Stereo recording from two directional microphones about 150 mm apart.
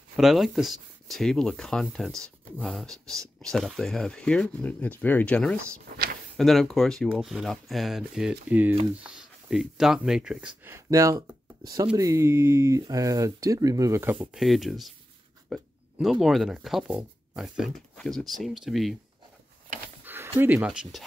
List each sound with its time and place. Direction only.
0.1 s speech: centre (ahead or behind); by 14.1 s 20° right (ahead or behind)
14.2 s speech: centre (ahead or behind)
20.1 s speech: 15° right (ahead or behind)